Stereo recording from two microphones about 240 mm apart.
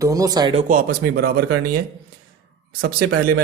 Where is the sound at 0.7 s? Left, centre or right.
Right.